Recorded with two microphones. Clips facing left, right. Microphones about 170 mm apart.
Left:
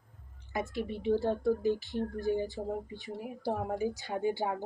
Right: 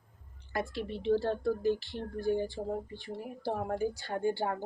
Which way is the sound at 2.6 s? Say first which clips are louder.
Even; 10° right (ahead or behind).